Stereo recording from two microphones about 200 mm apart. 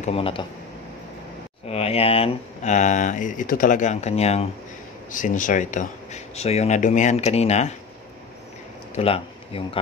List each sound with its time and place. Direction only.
0.0 s speech: 30° left (ahead or behind)
1.7 s speech: 30° left (ahead or behind)
8.9 s speech: 30° left (ahead or behind)